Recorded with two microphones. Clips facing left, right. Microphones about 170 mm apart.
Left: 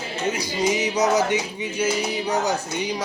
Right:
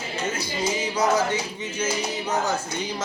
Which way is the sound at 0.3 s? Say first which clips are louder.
Left 5 dB; 15° left (ahead or behind).